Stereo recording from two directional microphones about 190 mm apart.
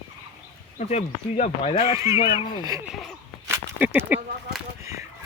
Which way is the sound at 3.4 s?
15° right (ahead or behind).